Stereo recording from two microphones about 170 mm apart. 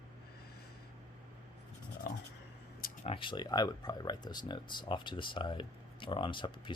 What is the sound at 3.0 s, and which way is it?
Speech, 30° left (ahead or behind).